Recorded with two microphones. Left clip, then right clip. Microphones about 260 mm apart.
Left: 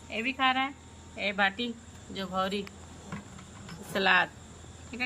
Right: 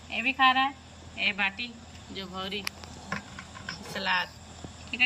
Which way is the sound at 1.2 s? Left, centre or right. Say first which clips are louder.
Even; left.